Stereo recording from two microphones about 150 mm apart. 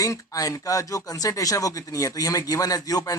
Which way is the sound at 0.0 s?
20° left (ahead or behind).